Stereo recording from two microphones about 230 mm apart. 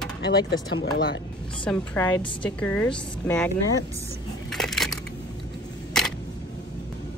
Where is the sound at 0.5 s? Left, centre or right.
Left.